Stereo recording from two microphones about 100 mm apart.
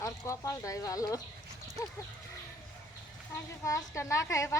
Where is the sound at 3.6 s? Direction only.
30° left (ahead or behind).